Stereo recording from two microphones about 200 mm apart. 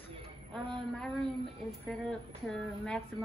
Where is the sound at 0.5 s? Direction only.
5° left (ahead or behind).